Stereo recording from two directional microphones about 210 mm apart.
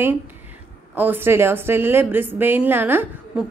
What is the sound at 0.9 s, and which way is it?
A woman's voice, 10° right (ahead or behind).